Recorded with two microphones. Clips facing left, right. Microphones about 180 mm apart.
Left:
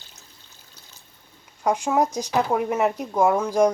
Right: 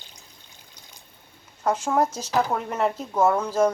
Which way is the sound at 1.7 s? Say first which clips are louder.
Left 1 dB; 15° left (ahead or behind).